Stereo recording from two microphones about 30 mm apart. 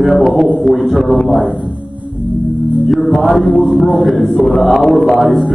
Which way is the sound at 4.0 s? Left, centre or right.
Centre.